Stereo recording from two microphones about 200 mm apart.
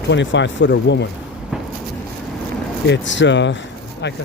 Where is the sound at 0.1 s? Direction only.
65° left (ahead or behind).